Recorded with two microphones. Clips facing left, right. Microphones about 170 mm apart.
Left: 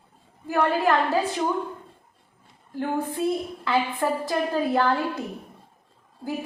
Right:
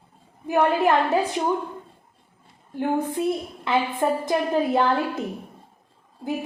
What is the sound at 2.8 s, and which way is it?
A woman's voice, 20° right (ahead or behind).